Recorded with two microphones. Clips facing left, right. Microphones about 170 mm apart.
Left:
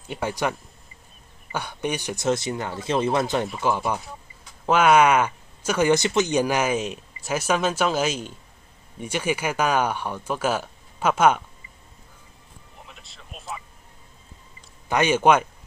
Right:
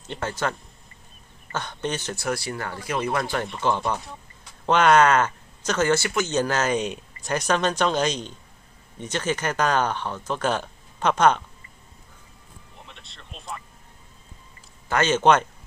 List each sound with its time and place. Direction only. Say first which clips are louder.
0.1 s speech: left 2 dB; 15° left (ahead or behind)
3.4 s speech: even; 5° left (ahead or behind)
12.8 s a sound: left 1 dB; 5° left (ahead or behind)
14.9 s speech: left 1 dB; 15° left (ahead or behind)